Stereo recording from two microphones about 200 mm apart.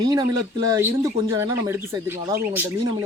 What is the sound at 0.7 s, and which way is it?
Speech, 15° right (ahead or behind).